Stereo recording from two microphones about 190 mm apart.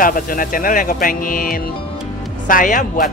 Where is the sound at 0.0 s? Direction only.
45° left (ahead or behind).